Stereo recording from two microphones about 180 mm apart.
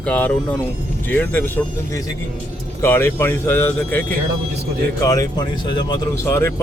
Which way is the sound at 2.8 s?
15° left (ahead or behind).